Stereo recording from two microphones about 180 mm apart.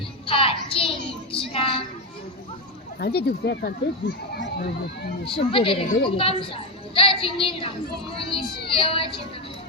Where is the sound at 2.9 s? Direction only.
65° left (ahead or behind).